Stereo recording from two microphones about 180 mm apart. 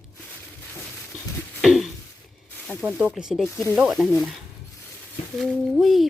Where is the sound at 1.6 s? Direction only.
Centre (ahead or behind).